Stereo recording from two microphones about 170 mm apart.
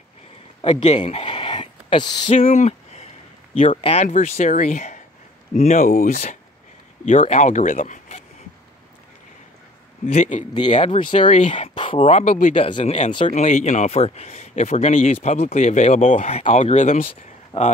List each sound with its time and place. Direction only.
0.8 s speech: 40° left (ahead or behind)
1.2 s a sound: 30° left (ahead or behind)
2.3 s speech: 45° left (ahead or behind)
10.0 s speech: 45° left (ahead or behind)
11.5 s speech: 30° left (ahead or behind); by 12.5 s 45° left (ahead or behind)
12.5 s speech: 30° left (ahead or behind)
13.3 s speech: 45° left (ahead or behind)